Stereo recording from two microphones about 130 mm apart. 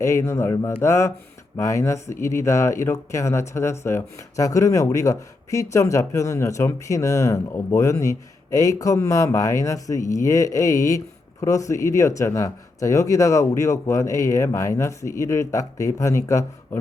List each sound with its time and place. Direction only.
0.0 s speech: 20° left (ahead or behind)